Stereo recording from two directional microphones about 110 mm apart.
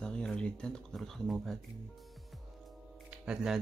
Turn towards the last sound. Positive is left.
turn(degrees=-5)  # may be behind; listen again after turning